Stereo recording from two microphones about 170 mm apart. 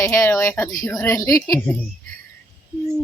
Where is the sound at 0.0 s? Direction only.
15° left (ahead or behind).